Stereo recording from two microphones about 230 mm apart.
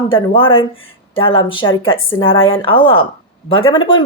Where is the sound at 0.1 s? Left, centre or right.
Left.